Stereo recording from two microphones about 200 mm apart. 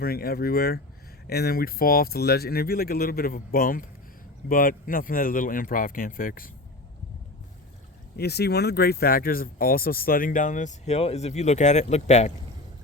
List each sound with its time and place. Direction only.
0.0 s speech: 50° left (ahead or behind)
8.1 s speech: 55° left (ahead or behind); by 12.3 s 35° left (ahead or behind)